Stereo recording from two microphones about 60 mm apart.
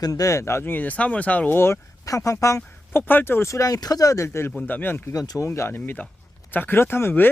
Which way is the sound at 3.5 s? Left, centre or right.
Left.